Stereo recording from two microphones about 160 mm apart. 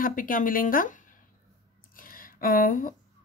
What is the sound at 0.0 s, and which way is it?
Speech, 60° left (ahead or behind).